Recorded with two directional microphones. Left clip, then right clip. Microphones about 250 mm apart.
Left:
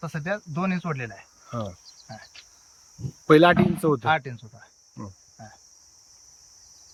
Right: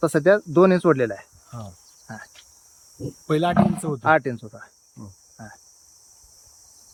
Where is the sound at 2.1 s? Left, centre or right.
Centre.